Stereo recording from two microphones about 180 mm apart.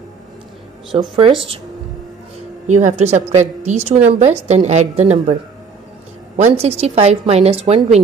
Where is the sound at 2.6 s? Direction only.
40° right (ahead or behind).